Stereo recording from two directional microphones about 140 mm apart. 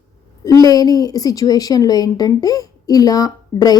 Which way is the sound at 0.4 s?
25° left (ahead or behind).